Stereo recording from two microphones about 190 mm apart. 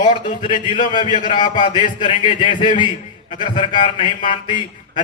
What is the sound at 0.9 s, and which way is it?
A man's voice, 25° left (ahead or behind).